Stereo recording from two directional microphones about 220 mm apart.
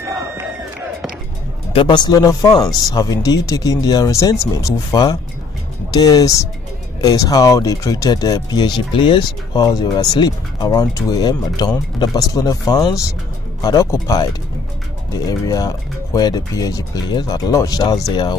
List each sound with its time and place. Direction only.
1.7 s speech: 25° left (ahead or behind)